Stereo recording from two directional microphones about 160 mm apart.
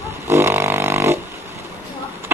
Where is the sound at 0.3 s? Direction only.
15° right (ahead or behind).